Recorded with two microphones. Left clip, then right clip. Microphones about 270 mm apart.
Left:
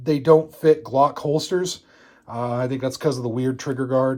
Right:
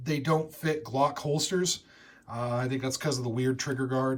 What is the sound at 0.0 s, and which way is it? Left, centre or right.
Speech, centre.